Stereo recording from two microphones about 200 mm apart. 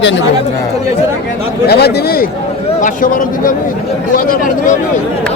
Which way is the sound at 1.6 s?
50° left (ahead or behind).